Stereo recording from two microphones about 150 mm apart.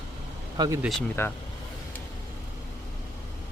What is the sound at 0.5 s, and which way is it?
Speech, 25° right (ahead or behind).